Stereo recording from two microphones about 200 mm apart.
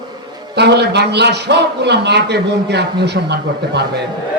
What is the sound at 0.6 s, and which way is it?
A man's voice, 55° right (ahead or behind).